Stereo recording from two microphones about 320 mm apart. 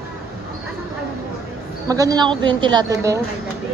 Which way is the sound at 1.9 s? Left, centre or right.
Centre.